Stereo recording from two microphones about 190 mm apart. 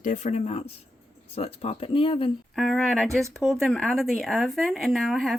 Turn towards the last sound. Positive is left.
turn(degrees=0)  # may be behind; listen again after turning